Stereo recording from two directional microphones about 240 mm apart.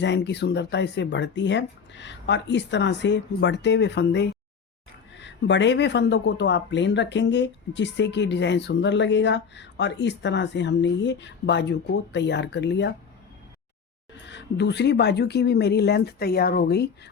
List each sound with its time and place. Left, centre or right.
0.0 s speech: left
14.3 s speech: left